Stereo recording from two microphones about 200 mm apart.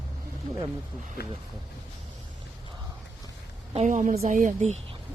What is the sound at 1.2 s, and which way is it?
Speech, 50° left (ahead or behind).